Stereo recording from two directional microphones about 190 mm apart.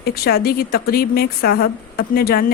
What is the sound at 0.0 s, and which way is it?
A woman's voice, 55° left (ahead or behind).